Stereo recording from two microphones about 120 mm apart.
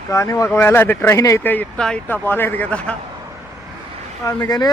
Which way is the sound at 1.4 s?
15° left (ahead or behind).